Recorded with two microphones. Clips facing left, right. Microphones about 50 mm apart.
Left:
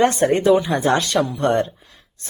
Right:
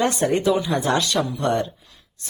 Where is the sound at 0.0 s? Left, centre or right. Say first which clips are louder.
Left 4 dB; left.